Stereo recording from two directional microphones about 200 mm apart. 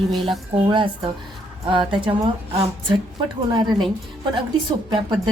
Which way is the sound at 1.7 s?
25° right (ahead or behind).